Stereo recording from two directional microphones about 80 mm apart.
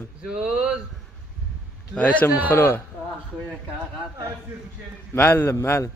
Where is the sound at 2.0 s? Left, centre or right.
Centre.